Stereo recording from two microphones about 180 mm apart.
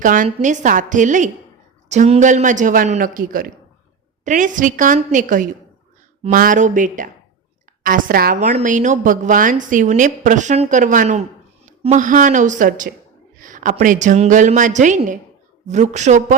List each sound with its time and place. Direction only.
0.0 s a woman's voice: 45° right (ahead or behind)